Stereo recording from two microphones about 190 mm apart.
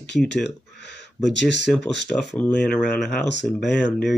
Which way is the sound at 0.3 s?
65° left (ahead or behind).